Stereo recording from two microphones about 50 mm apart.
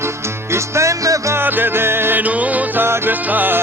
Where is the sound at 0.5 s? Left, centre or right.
Right.